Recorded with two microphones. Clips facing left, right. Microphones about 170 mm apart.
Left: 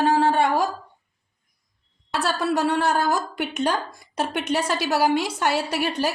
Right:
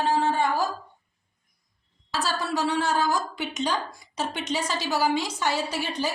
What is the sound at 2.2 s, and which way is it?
Speech, 60° left (ahead or behind).